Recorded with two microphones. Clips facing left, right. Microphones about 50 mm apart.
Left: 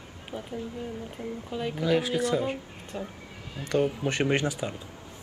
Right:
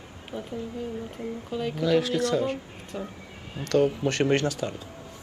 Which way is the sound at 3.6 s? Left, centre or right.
Centre.